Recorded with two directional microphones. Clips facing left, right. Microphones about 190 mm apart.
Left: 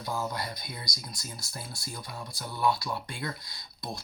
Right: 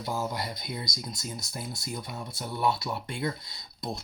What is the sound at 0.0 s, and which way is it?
Speech, 20° right (ahead or behind).